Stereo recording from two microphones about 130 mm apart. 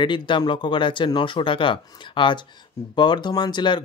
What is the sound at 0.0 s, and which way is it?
Speech, 40° left (ahead or behind).